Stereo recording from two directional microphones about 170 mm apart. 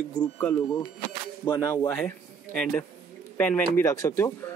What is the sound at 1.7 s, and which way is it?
Speech, 10° left (ahead or behind).